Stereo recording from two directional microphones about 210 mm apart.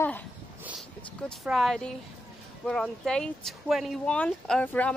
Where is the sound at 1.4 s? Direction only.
Centre (ahead or behind).